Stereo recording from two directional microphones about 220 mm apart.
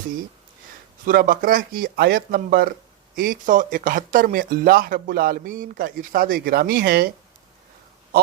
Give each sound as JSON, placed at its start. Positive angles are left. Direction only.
{"t": 1.0, "sound": "speech", "side_deg": -40}